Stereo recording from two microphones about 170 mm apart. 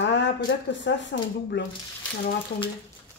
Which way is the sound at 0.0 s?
90° left.